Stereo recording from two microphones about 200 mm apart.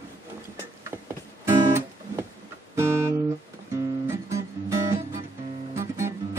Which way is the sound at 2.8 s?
10° right (ahead or behind).